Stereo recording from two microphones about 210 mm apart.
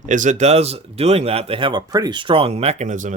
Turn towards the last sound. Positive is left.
turn(degrees=-35)  # may be behind; listen again after turning